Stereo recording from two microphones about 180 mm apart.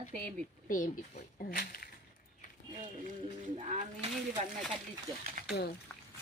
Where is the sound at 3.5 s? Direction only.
40° right (ahead or behind).